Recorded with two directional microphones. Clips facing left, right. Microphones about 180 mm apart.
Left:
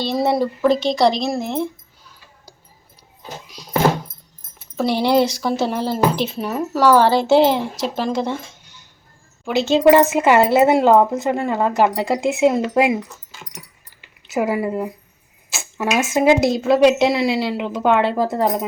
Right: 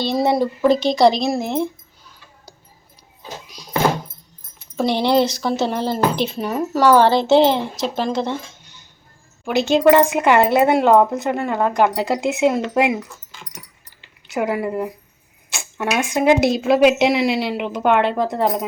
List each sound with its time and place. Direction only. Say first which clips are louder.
0.0 s speech: right 1 dB; centre (ahead or behind)
4.6 s speech: even; 5° left (ahead or behind)
9.6 s speech: even; 15° right (ahead or behind)
9.8 s speech: left 2 dB; 5° left (ahead or behind)
13.1 s dog: even; 5° left (ahead or behind)
14.3 s speech: left 1 dB; centre (ahead or behind)